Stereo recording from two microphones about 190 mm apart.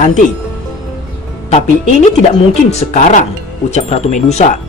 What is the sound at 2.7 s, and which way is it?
A woman's voice, 40° left (ahead or behind).